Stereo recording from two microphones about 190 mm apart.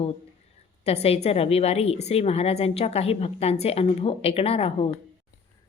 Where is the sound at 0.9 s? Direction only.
30° left (ahead or behind).